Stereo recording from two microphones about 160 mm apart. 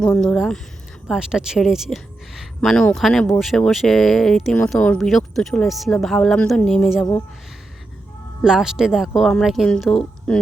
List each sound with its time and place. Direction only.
0.0 s speech: 5° left (ahead or behind)
8.4 s speech: 5° right (ahead or behind)